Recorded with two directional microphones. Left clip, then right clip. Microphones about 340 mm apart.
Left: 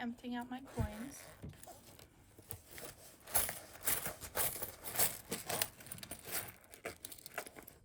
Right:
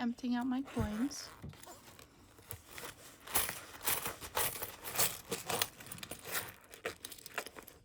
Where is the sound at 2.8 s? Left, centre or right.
Centre.